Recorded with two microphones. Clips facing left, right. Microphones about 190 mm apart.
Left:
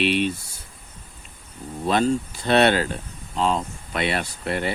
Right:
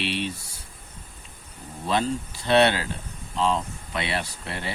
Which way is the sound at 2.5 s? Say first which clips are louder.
Left 2 dB; 50° left (ahead or behind).